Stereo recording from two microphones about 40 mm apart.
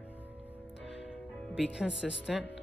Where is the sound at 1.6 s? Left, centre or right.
Right.